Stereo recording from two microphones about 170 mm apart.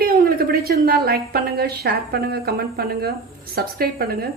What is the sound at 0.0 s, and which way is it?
A woman's voice, 60° right (ahead or behind).